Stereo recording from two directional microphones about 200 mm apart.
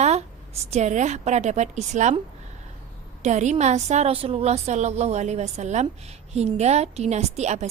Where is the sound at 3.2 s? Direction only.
35° right (ahead or behind).